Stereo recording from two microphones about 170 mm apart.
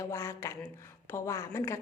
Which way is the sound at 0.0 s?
15° left (ahead or behind).